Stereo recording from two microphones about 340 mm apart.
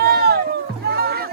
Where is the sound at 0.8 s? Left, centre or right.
Right.